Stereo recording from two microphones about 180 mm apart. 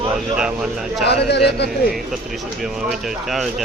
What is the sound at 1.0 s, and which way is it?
Speech, 65° left (ahead or behind).